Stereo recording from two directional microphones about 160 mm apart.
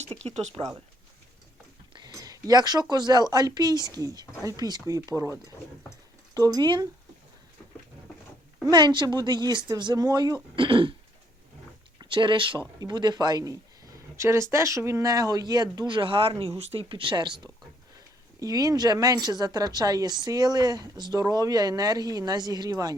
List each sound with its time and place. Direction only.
0.2 s speech: 45° right (ahead or behind)
1.9 s a sound: 25° right (ahead or behind)
2.9 s speech: 25° right (ahead or behind)
8.6 s speech: 25° right (ahead or behind)
10.5 s throat clearing: 30° right (ahead or behind)
11.9 s speech: 30° right (ahead or behind)